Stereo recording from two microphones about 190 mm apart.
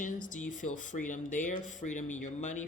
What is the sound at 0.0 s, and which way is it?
Speech, 45° left (ahead or behind).